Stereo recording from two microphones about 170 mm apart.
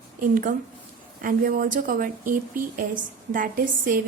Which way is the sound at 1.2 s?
55° right (ahead or behind).